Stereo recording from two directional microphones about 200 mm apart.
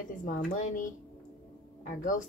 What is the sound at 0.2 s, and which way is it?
Speech, 40° left (ahead or behind).